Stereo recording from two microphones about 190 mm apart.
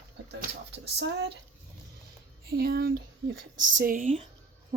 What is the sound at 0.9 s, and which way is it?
Speech, 65° right (ahead or behind).